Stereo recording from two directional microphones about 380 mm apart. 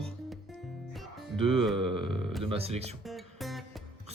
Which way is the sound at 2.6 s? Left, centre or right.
Centre.